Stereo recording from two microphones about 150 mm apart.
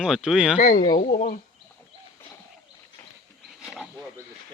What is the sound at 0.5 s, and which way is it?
Speech, 55° left (ahead or behind).